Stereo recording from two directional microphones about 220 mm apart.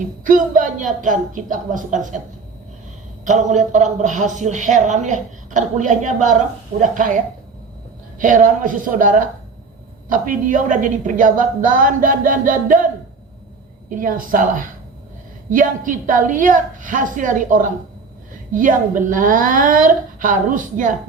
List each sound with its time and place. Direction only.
0.0 s a man's voice: 40° right (ahead or behind)
3.2 s a man's voice: 35° right (ahead or behind)
8.2 s a man's voice: 35° right (ahead or behind)
13.9 s a man's voice: 40° right (ahead or behind)